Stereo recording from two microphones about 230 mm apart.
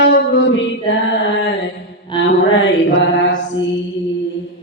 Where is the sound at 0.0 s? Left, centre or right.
Left.